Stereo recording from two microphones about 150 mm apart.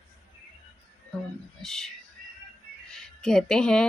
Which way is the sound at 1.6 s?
Centre (ahead or behind).